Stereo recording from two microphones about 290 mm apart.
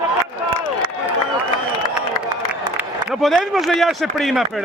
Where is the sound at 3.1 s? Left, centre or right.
Centre.